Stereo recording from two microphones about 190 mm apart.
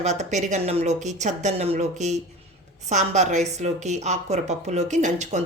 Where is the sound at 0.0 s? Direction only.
35° right (ahead or behind).